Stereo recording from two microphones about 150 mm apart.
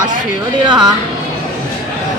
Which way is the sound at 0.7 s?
30° right (ahead or behind).